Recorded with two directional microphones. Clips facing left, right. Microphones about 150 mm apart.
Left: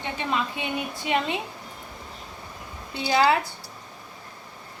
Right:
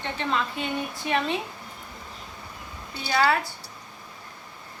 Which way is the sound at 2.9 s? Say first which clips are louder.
Left 3 dB; 15° left (ahead or behind).